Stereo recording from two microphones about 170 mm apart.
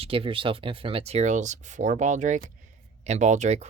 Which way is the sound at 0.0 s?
30° right (ahead or behind).